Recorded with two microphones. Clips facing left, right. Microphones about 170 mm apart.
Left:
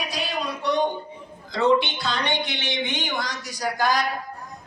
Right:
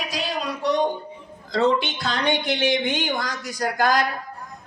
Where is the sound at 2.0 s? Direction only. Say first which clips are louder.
Right 3 dB; 50° right (ahead or behind).